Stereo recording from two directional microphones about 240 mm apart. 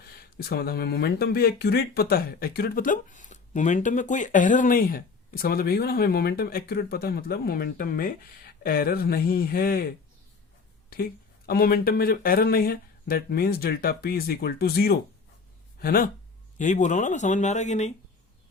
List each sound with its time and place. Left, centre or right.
0.0 s speech: left
10.8 s speech: left